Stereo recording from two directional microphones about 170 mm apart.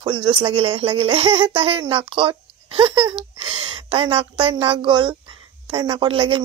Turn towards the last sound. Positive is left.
turn(degrees=-30)  # may be behind; listen again after turning